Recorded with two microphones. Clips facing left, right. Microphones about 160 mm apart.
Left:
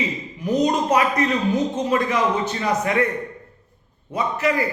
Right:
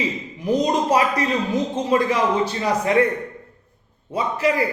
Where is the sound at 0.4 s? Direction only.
30° right (ahead or behind).